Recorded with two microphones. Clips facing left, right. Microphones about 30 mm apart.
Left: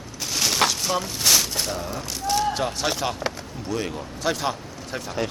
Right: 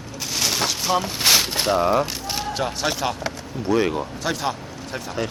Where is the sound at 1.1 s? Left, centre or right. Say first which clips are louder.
Right 3 dB; right.